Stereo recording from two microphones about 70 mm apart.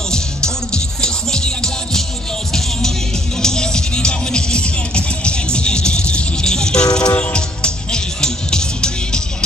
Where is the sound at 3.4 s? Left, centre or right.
Centre.